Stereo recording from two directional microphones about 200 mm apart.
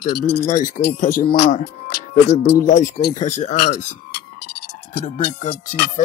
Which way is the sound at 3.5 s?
50° left (ahead or behind).